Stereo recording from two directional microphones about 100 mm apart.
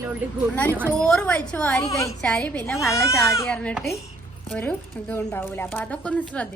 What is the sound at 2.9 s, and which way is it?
Speech, 30° left (ahead or behind).